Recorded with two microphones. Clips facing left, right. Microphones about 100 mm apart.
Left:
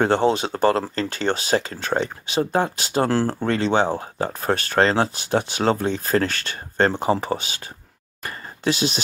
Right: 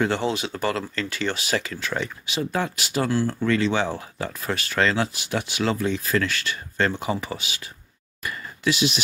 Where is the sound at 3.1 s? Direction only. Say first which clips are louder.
Left 1 dB; 45° left (ahead or behind).